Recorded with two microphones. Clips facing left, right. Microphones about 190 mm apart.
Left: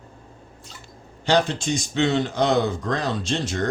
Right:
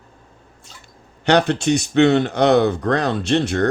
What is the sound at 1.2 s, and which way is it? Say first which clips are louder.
Speech: right 5 dB; 65° right (ahead or behind).